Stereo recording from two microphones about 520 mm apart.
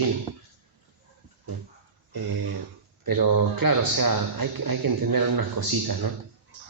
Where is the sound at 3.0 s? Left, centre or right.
Right.